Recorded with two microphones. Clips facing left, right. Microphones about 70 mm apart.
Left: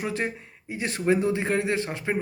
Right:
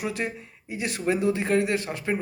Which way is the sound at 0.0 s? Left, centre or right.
Left.